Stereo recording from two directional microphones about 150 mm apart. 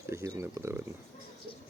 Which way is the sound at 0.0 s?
20° right (ahead or behind).